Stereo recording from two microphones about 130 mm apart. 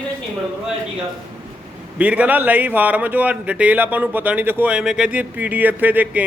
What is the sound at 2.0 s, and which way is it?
Speech, 10° right (ahead or behind).